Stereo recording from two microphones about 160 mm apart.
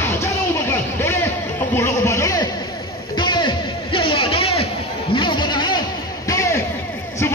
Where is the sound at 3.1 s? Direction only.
30° left (ahead or behind).